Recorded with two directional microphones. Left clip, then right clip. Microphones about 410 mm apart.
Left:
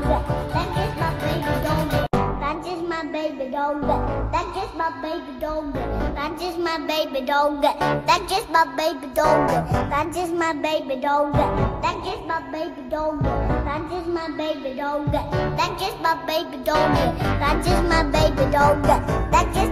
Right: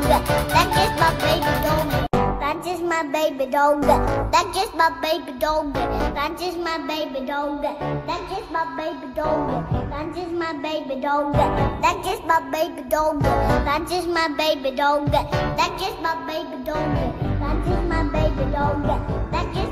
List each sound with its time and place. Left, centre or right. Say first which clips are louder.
0.1 s music: right 7 dB; right; by 2.5 s centre
3.8 s music: right 5 dB; right
5.4 s music: right 4 dB; centre; by 8.2 s left
8.5 s a woman's voice: left 6 dB; left
9.8 s music: left 6 dB; centre
11.3 s music: right 1 dB; centre
12.9 s music: right 4 dB; right
14.4 s music: right 6 dB; centre; by 18.9 s left
19.3 s music: left 7 dB; centre